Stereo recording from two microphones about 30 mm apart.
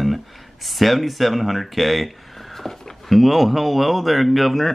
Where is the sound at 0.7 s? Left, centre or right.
Centre.